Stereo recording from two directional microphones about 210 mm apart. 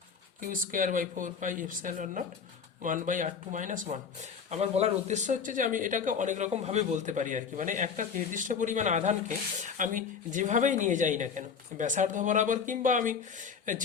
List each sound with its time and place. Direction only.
0.4 s speech: 40° right (ahead or behind)